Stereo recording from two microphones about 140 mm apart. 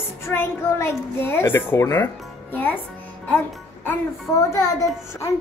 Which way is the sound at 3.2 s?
15° left (ahead or behind).